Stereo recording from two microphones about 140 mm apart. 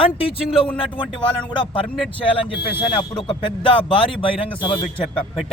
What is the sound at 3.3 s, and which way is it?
A man's voice, 35° left (ahead or behind).